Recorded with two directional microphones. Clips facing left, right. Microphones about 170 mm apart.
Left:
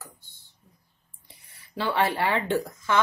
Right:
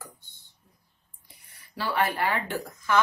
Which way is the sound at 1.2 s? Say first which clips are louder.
Left 2 dB; 25° left (ahead or behind).